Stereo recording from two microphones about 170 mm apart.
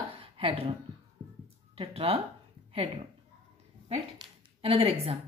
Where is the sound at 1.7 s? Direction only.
35° right (ahead or behind).